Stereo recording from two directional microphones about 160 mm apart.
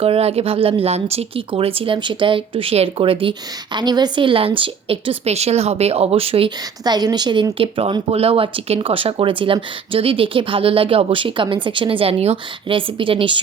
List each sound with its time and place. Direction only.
0.0 s speech: 40° right (ahead or behind)